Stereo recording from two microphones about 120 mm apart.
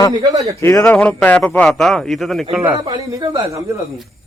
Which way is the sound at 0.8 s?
10° left (ahead or behind).